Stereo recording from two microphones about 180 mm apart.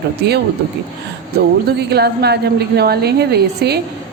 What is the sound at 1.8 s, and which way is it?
Speech, 65° right (ahead or behind).